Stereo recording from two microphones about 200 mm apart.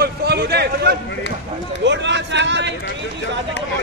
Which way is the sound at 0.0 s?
55° right (ahead or behind).